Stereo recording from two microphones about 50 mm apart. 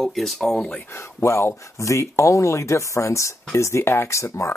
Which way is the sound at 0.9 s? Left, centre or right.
Left.